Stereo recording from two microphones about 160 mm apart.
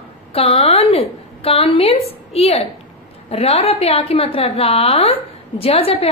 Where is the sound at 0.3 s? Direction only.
35° left (ahead or behind).